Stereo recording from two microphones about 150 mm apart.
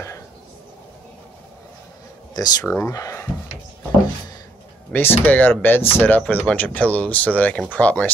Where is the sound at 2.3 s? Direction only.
25° left (ahead or behind).